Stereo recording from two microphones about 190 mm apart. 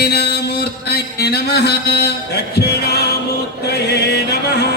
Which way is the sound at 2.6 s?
55° left (ahead or behind).